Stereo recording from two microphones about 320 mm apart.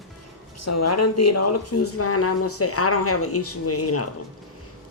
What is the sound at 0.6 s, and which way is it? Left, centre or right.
Speech, left.